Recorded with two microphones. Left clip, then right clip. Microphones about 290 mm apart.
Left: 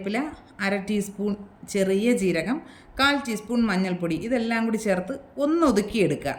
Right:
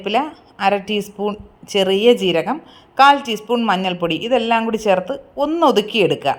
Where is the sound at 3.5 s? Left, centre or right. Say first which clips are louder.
Right 9 dB; centre.